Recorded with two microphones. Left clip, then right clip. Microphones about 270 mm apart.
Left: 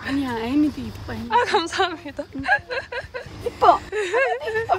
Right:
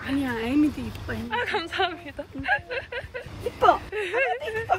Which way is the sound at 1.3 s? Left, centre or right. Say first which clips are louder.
Left 8 dB; centre.